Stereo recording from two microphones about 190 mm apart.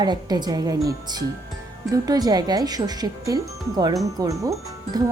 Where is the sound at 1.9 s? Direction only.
20° right (ahead or behind).